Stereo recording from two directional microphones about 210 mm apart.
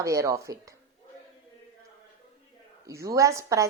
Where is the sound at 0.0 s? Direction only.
15° right (ahead or behind).